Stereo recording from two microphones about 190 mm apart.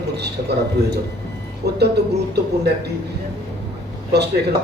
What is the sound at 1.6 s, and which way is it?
Speech, 60° right (ahead or behind).